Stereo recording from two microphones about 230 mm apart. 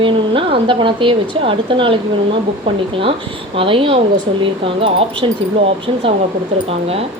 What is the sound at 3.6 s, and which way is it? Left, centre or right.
Speech, right.